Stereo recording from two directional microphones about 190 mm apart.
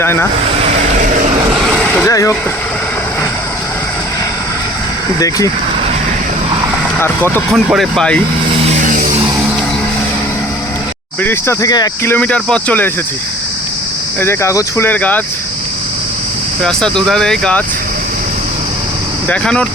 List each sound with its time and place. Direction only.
0.0 s speech: 15° left (ahead or behind)
0.6 s vehicle: 35° right (ahead or behind)
1.6 s vehicle: centre (ahead or behind)
2.0 s speech: 15° left (ahead or behind)
7.5 s speech: centre (ahead or behind)
8.6 s vehicle: 40° right (ahead or behind)
11.2 s speech: 10° left (ahead or behind)
12.1 s speech: 5° left (ahead or behind)
14.2 s speech: 15° left (ahead or behind)
16.6 s speech: 5° left (ahead or behind)
19.3 s speech: 5° left (ahead or behind)